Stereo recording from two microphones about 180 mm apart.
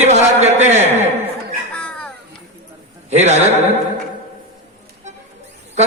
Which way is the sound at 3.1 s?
40° right (ahead or behind).